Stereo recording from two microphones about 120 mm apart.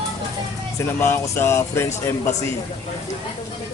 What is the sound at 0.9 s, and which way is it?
Speech, 20° left (ahead or behind).